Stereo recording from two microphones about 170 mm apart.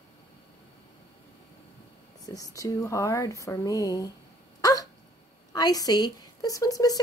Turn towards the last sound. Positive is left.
turn(degrees=20)  # may be behind; listen again after turning